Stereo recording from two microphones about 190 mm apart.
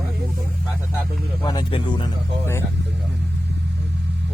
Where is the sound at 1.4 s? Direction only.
20° left (ahead or behind).